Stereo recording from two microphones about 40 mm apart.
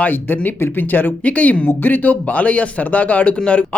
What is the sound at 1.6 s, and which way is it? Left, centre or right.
Speech, left.